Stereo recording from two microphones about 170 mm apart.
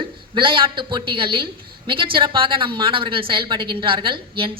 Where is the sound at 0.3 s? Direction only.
30° right (ahead or behind).